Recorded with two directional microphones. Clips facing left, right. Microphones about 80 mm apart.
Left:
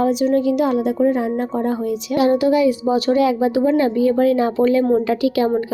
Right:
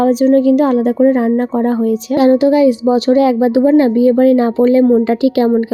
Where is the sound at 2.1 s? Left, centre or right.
Right.